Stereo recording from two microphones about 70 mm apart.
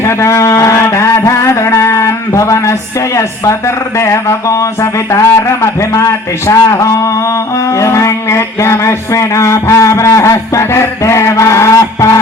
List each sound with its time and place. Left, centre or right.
0.0 s music: left
3.9 s speech: left